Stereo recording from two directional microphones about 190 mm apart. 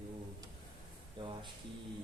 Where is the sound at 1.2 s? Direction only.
25° right (ahead or behind).